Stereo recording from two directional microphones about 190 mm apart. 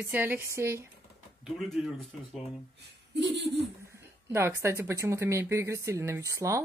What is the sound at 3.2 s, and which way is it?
Speech, 65° right (ahead or behind).